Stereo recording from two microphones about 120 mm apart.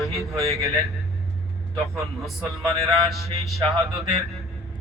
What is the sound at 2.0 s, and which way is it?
A man's voice, centre (ahead or behind).